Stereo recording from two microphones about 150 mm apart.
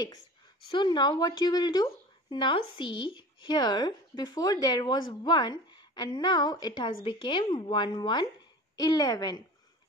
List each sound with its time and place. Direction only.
0.7 s a woman's voice: 30° left (ahead or behind)